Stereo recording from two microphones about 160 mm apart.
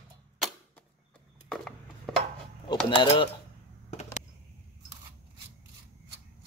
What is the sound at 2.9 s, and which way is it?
Speech, 30° left (ahead or behind).